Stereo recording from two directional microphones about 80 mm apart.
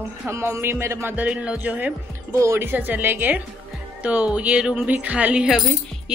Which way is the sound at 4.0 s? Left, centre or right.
Centre.